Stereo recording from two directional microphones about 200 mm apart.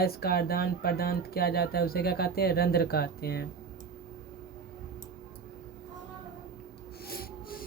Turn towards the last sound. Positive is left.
turn(degrees=45)  # may be behind; listen again after turning